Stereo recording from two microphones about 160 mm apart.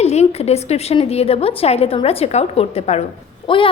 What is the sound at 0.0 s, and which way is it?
A woman's voice, 40° left (ahead or behind).